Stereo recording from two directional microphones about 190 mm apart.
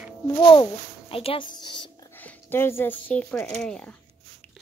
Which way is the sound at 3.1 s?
10° left (ahead or behind).